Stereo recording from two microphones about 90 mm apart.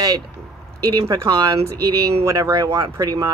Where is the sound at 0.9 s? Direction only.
45° right (ahead or behind).